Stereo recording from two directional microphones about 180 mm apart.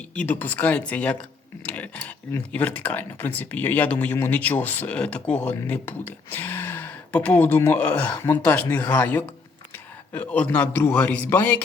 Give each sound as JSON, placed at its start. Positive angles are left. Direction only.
{"t": 0.2, "sound": "speech", "side_deg": 10}